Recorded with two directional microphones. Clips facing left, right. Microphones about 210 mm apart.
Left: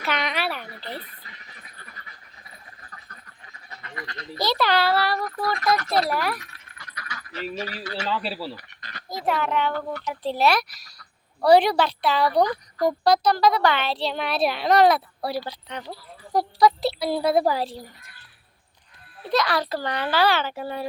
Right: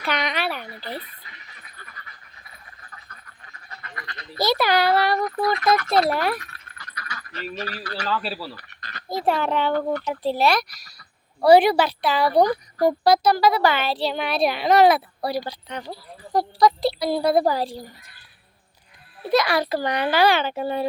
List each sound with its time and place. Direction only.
0.0 s a sound: centre (ahead or behind)
4.0 s speech: 40° left (ahead or behind)
4.4 s a child's voice: 10° right (ahead or behind); by 6.4 s 25° right (ahead or behind)
6.7 s a sound: 15° left (ahead or behind)
7.5 s speech: 10° left (ahead or behind)
7.9 s speech: 25° left (ahead or behind)
9.0 s a child's voice: 30° right (ahead or behind)
10.2 s speech: centre (ahead or behind)
12.5 s speech: 30° right (ahead or behind)
13.1 s speech: 10° right (ahead or behind)
19.3 s a child's voice: 10° right (ahead or behind)